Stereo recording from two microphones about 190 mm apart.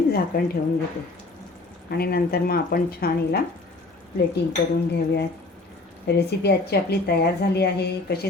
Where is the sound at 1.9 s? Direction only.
55° left (ahead or behind).